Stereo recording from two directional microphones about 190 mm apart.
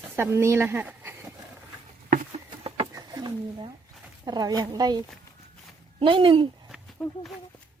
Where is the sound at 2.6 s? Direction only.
30° right (ahead or behind).